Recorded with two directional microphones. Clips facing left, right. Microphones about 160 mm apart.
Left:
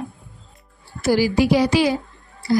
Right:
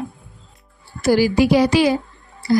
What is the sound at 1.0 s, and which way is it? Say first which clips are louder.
Speech: right 2 dB; 55° right (ahead or behind).